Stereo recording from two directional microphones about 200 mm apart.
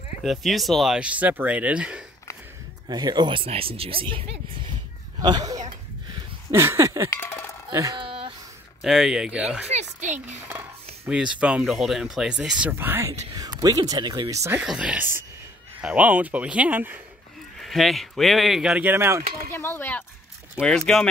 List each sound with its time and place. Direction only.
0.2 s speech: centre (ahead or behind)
2.9 s speech: 20° right (ahead or behind)
6.5 s a sound: 15° right (ahead or behind)
7.1 s music: 10° left (ahead or behind)
7.7 s dog: 20° right (ahead or behind)
8.8 s speech: centre (ahead or behind)
9.7 s a sound: 35° right (ahead or behind)
11.1 s speech: 5° right (ahead or behind)
14.6 s speech: 5° right (ahead or behind)
19.5 s speech: 10° left (ahead or behind)